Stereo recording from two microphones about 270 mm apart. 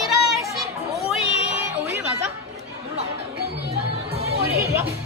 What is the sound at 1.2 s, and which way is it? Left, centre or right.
Music, left.